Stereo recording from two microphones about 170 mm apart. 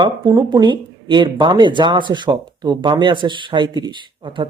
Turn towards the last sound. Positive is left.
turn(degrees=-30)  # may be behind; listen again after turning